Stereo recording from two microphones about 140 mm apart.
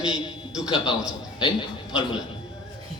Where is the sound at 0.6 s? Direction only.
35° left (ahead or behind).